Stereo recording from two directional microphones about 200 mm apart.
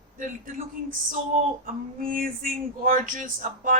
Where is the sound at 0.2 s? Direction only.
40° right (ahead or behind).